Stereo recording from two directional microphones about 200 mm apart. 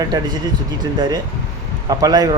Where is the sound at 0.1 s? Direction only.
20° right (ahead or behind).